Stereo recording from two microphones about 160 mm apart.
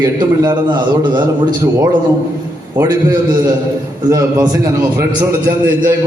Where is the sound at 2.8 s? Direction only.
20° right (ahead or behind).